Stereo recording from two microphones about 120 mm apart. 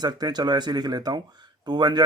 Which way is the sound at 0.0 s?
35° right (ahead or behind).